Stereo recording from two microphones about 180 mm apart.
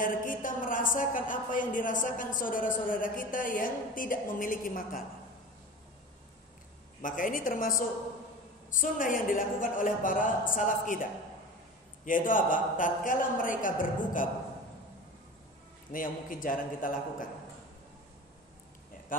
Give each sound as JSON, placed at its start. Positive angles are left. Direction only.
{"t": 0.0, "sound": "a woman's voice", "side_deg": 50}
{"t": 7.0, "sound": "a woman's voice", "side_deg": 50}
{"t": 15.9, "sound": "a woman's voice", "side_deg": 50}